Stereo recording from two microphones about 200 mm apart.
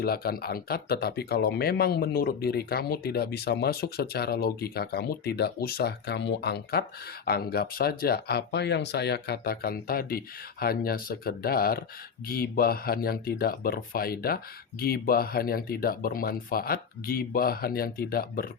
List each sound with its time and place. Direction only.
0.0 s speech: 50° left (ahead or behind)